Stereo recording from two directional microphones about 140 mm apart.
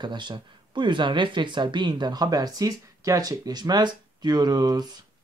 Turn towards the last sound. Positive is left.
turn(degrees=-30)  # may be behind; listen again after turning